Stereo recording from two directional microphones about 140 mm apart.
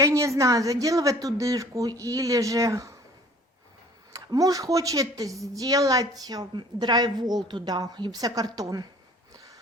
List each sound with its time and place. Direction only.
0.0 s a woman's voice: 20° right (ahead or behind)
4.1 s a woman's voice: 25° right (ahead or behind)
9.3 s a sound: 25° right (ahead or behind)